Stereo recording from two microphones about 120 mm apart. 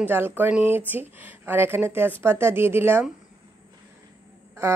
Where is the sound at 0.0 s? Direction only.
20° right (ahead or behind).